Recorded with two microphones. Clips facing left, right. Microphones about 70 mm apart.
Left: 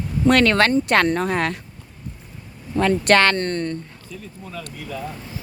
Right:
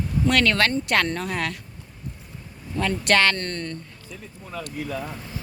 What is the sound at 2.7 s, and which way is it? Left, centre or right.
Speech, left.